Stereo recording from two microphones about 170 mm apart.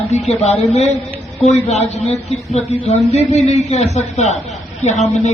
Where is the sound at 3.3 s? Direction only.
40° left (ahead or behind).